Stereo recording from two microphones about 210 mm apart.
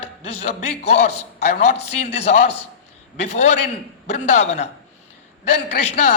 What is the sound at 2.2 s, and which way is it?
A man's voice, 30° left (ahead or behind).